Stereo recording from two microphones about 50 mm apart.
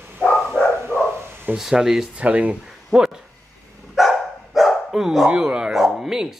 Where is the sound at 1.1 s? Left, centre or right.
Right.